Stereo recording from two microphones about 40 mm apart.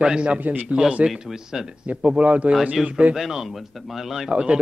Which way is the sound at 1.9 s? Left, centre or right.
Right.